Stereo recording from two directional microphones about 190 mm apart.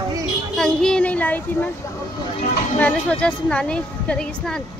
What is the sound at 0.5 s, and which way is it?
Speech, 5° left (ahead or behind).